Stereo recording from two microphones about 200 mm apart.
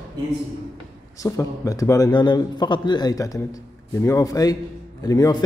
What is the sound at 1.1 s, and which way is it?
A man's voice, 15° left (ahead or behind).